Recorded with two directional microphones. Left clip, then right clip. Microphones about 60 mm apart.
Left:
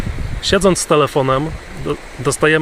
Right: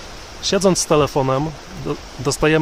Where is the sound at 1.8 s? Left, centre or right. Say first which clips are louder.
Left 4 dB; centre.